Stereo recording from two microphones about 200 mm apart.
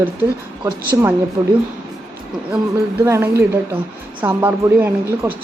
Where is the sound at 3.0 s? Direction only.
15° right (ahead or behind).